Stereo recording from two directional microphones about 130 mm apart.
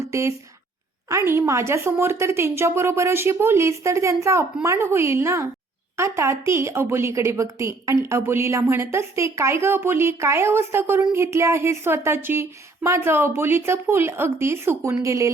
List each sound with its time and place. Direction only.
0.1 s speech: 20° right (ahead or behind)